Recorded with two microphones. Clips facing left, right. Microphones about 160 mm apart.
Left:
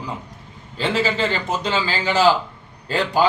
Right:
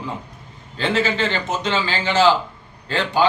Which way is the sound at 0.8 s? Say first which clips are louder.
Even; 5° left (ahead or behind).